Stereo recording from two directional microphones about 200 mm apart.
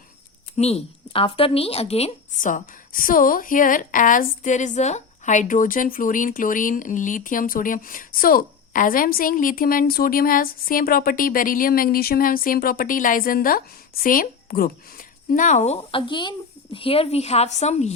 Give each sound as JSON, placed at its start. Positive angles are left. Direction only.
{"t": 0.5, "sound": "a woman's voice", "side_deg": 30}